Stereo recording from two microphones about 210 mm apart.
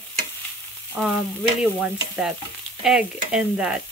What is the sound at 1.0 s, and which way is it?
Stir, centre (ahead or behind).